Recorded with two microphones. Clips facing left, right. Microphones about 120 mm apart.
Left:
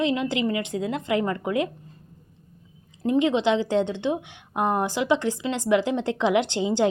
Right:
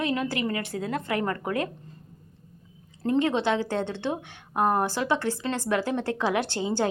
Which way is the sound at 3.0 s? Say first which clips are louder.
Left 3 dB; 15° left (ahead or behind).